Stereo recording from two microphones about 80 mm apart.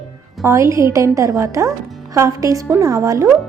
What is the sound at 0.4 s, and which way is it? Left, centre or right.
A woman's voice, right.